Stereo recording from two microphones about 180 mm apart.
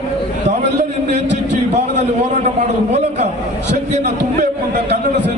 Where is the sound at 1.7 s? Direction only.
40° right (ahead or behind).